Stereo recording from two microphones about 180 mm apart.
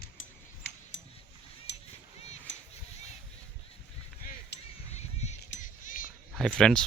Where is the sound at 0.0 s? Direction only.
80° left.